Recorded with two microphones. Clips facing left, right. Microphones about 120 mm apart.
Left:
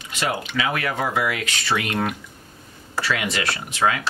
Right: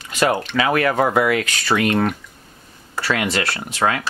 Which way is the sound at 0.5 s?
50° right (ahead or behind).